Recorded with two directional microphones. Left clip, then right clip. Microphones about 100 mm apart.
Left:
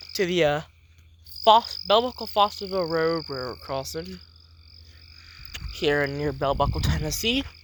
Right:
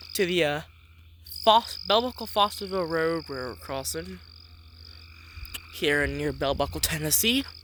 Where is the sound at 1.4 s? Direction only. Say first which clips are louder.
Left 3 dB; 55° right (ahead or behind).